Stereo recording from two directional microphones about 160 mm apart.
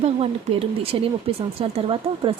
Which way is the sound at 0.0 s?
40° right (ahead or behind).